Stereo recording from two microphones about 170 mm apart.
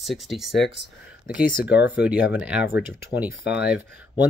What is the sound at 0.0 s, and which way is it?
Speech, centre (ahead or behind).